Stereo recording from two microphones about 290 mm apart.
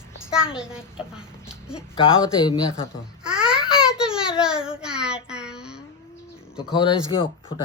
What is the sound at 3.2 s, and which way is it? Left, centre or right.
Babbling, centre.